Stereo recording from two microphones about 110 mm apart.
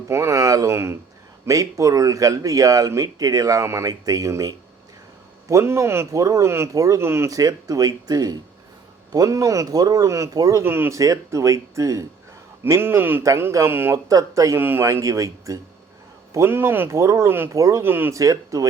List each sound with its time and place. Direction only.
0.1 s speech: 25° right (ahead or behind)
10.6 s speech: 20° right (ahead or behind)
14.1 s speech: 30° right (ahead or behind)